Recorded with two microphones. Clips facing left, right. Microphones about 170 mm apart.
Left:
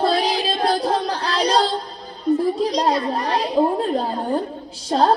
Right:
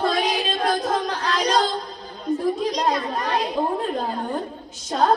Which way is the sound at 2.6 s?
35° left (ahead or behind).